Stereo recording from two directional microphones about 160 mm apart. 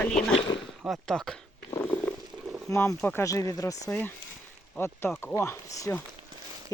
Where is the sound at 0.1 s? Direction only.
35° left (ahead or behind).